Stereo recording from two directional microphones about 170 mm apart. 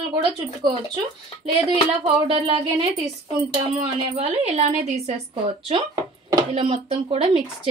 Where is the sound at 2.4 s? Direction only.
35° right (ahead or behind).